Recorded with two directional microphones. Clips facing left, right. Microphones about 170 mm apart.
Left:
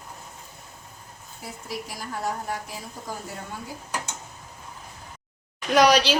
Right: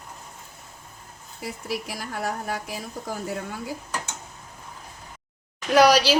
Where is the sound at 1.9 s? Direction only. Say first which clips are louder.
Right 1 dB; 75° right (ahead or behind).